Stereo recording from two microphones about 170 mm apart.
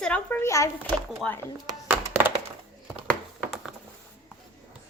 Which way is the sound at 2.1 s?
10° right (ahead or behind).